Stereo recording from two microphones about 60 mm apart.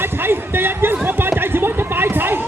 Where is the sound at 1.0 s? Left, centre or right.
Right.